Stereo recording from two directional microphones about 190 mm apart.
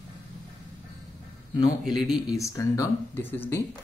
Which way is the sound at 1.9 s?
Centre (ahead or behind).